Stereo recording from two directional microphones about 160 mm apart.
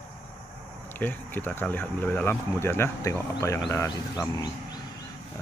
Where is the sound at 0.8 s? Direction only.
10° left (ahead or behind).